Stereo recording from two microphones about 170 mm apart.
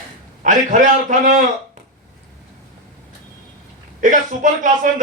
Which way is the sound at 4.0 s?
50° right (ahead or behind).